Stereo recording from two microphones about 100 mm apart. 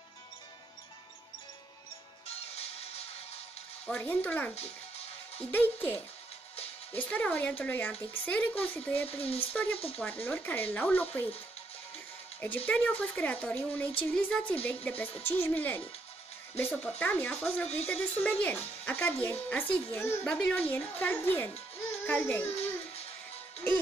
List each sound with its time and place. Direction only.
2.2 s music: 90° left
3.8 s speech: 15° left (ahead or behind)
4.6 s music: 90° left
5.4 s a child's voice: 20° left (ahead or behind)
12.4 s a child's voice: 20° left (ahead or behind)
20.2 s speech: 10° left (ahead or behind)